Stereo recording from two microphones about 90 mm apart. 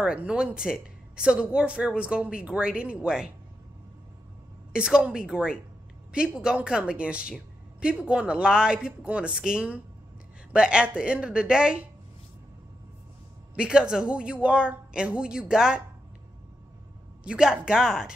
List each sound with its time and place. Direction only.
0.0 s a woman's voice: 10° right (ahead or behind)
4.7 s a woman's voice: 10° right (ahead or behind)
13.6 s a woman's voice: 10° right (ahead or behind)
17.2 s a woman's voice: 10° right (ahead or behind)